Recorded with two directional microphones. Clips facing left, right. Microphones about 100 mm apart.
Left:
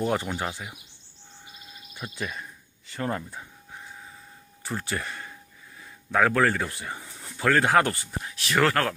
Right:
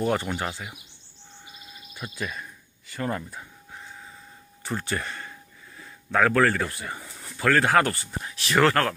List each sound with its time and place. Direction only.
0.0 s speech: 10° left (ahead or behind)
2.0 s speech: 20° left (ahead or behind)
4.6 s speech: 5° left (ahead or behind)
8.2 s speech: centre (ahead or behind)